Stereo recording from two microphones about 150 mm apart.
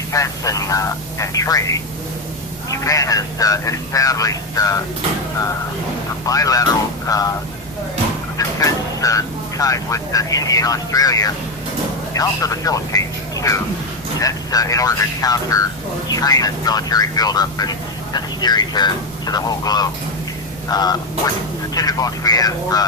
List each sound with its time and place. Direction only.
0.1 s speech: 20° left (ahead or behind)
6.2 s speech: 25° left (ahead or behind)
8.4 s speech: 20° left (ahead or behind)